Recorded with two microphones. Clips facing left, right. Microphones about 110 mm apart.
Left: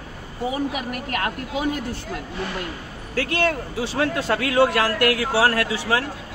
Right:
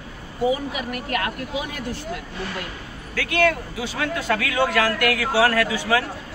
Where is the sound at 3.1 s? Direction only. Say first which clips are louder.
Right 2 dB; 30° left (ahead or behind).